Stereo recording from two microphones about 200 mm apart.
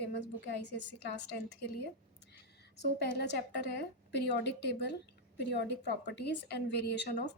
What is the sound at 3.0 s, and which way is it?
A woman's voice, 55° left (ahead or behind).